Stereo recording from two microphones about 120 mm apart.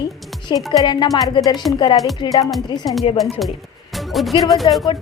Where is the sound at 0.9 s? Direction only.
35° left (ahead or behind).